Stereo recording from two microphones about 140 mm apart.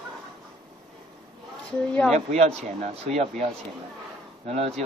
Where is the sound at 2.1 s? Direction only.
55° right (ahead or behind).